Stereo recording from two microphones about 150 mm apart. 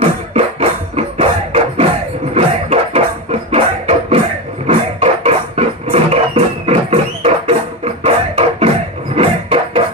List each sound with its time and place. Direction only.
0.0 s music: 40° right (ahead or behind)